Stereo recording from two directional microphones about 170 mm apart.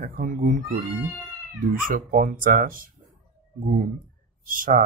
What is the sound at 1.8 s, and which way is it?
Speech, 55° right (ahead or behind).